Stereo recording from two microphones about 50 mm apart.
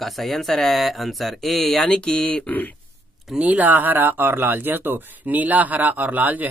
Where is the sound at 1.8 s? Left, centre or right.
Centre.